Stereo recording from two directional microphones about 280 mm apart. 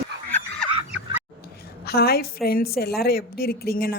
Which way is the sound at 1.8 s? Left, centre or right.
Left.